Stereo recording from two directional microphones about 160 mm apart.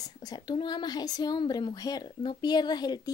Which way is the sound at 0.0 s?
25° left (ahead or behind).